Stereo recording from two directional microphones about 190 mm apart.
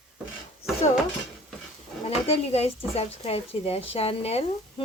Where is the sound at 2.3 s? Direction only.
30° left (ahead or behind).